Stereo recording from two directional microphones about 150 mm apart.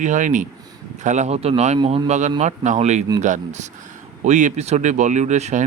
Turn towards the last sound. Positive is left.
turn(degrees=-50)  # may be behind; listen again after turning